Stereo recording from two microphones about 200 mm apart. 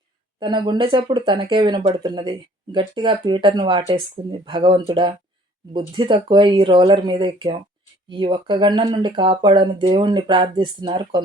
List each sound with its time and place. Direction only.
0.3 s speech: 20° right (ahead or behind)